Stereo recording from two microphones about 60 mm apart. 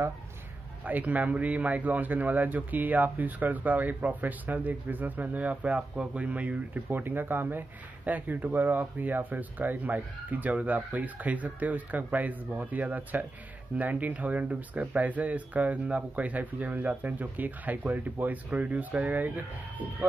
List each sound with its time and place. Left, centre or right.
0.8 s speech: right
6.9 s speech: right